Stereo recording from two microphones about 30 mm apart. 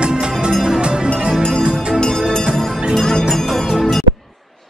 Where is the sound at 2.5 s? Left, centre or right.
Centre.